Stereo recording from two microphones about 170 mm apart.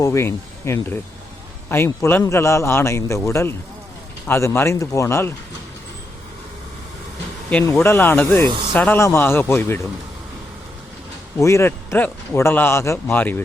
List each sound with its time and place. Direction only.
0.0 s speech: 15° left (ahead or behind)
7.6 s speech: 15° left (ahead or behind)
11.3 s speech: 15° left (ahead or behind)